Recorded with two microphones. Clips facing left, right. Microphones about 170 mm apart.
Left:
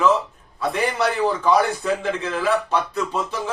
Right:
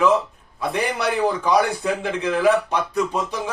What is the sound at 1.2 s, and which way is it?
A man's voice, 15° right (ahead or behind).